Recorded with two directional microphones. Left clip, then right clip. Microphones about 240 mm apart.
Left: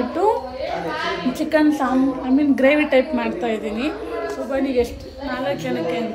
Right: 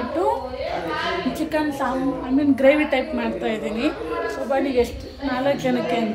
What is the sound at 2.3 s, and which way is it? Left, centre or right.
A woman's voice, left.